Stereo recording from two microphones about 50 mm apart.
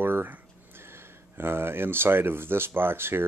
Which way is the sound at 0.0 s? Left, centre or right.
Right.